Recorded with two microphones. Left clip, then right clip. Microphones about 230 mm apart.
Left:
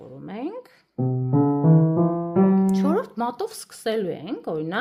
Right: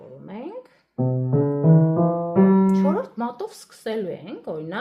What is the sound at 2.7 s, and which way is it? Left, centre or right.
A woman's voice, left.